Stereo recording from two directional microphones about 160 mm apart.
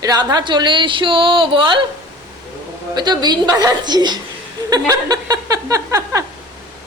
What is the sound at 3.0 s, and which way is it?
Speech, 25° right (ahead or behind).